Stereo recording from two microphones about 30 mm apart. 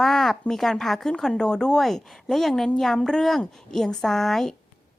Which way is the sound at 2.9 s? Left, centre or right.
Left.